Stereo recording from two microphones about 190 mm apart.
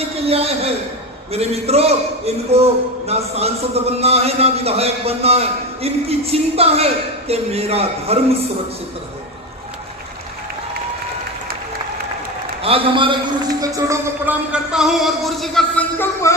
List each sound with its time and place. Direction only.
0.3 s a man's voice: 30° right (ahead or behind)
12.6 s a man's voice: 30° right (ahead or behind); by 16.3 s 10° left (ahead or behind)